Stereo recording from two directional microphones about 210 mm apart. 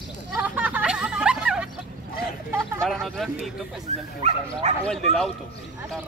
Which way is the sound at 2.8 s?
Centre (ahead or behind).